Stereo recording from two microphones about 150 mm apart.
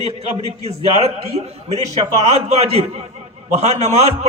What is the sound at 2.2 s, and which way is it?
A man's voice, 45° right (ahead or behind).